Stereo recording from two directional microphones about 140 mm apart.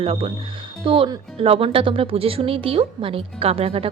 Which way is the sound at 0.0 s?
45° right (ahead or behind).